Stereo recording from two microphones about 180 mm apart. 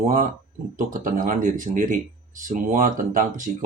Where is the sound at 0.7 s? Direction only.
50° right (ahead or behind).